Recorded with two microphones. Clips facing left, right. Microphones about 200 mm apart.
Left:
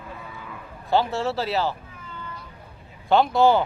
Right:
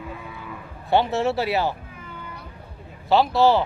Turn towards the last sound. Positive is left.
turn(degrees=-5)  # may be behind; listen again after turning